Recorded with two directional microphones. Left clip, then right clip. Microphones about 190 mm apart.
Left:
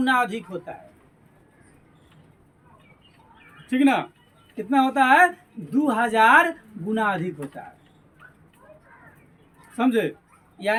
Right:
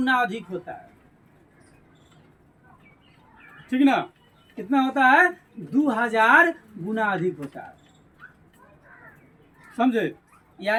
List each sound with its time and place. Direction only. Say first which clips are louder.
0.0 s speech: left 1 dB; 30° left (ahead or behind)
3.7 s speech: even; 30° left (ahead or behind)
9.7 s speech: left 1 dB; 35° left (ahead or behind)